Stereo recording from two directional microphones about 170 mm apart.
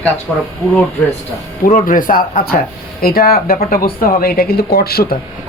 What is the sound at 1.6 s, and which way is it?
Speech, 50° left (ahead or behind).